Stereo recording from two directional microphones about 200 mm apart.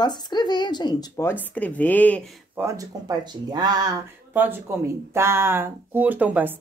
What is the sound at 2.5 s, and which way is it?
Speech, 15° right (ahead or behind).